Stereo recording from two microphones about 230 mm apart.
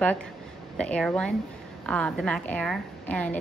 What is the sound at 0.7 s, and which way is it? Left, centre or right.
A woman's voice, centre.